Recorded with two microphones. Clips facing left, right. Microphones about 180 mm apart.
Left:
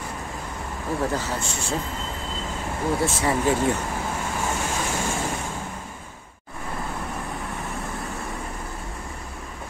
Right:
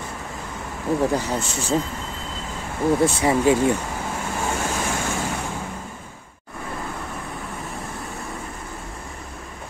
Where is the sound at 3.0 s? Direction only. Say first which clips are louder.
Right 4 dB; 15° right (ahead or behind).